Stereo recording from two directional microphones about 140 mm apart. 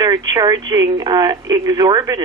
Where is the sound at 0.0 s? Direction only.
30° right (ahead or behind).